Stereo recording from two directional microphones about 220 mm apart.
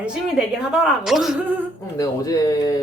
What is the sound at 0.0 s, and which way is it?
Speech, 5° right (ahead or behind).